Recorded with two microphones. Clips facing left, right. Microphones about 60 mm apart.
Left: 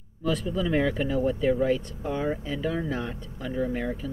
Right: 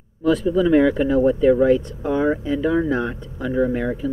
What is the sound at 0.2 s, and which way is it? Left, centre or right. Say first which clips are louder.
Speech: right 10 dB; centre.